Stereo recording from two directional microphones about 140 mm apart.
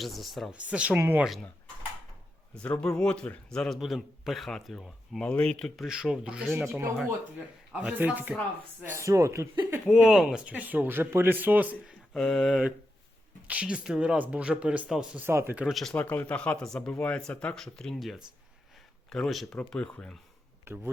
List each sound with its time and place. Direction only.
0.0 s a man's voice: centre (ahead or behind)
2.8 s a man's voice: 5° left (ahead or behind)
6.7 s speech: 20° right (ahead or behind)
7.3 s speech: 10° right (ahead or behind)
9.9 s speech: 5° right (ahead or behind)
12.1 s a man's voice: 5° left (ahead or behind)
15.2 s speech: 15° right (ahead or behind)
15.6 s a man's voice: centre (ahead or behind)
20.7 s speech: 15° right (ahead or behind)